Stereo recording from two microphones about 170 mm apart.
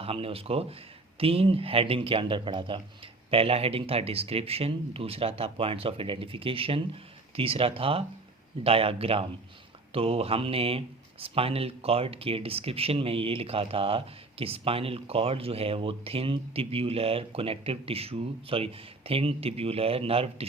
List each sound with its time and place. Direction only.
0.0 s speech: 35° right (ahead or behind)